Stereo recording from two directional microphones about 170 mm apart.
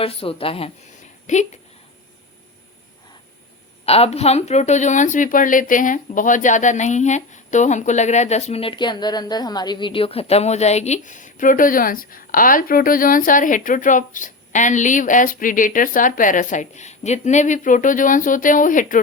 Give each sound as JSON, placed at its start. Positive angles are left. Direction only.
{"t": 0.0, "sound": "a woman's voice", "side_deg": 35}
{"t": 1.3, "sound": "speech", "side_deg": 45}
{"t": 3.8, "sound": "speech", "side_deg": 35}